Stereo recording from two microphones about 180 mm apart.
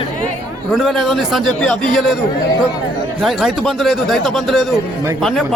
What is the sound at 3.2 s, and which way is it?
A man's voice, centre (ahead or behind).